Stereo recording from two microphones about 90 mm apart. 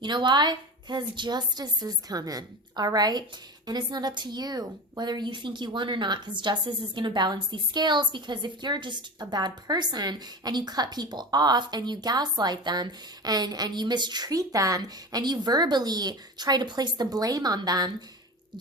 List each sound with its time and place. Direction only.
0.0 s a woman's voice: 60° right (ahead or behind)